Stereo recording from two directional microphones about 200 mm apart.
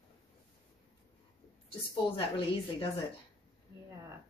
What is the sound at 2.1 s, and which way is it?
Speech, 25° left (ahead or behind).